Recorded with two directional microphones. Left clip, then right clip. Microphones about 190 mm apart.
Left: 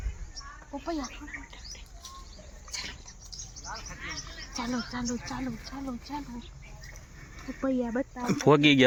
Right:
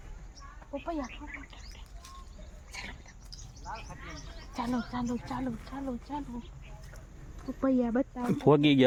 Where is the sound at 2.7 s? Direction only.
40° right (ahead or behind).